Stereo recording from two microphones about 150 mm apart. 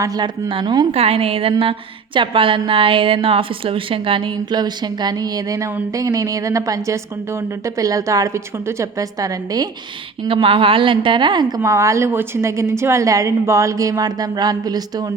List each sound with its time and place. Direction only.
0.0 s a woman's voice: 25° right (ahead or behind)
0.9 s a woman's voice: 40° right (ahead or behind); by 9.6 s 25° right (ahead or behind)
10.2 s a woman's voice: 35° right (ahead or behind)